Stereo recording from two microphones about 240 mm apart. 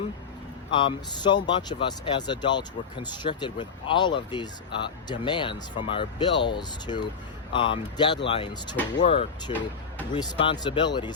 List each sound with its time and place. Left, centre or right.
0.7 s speech: centre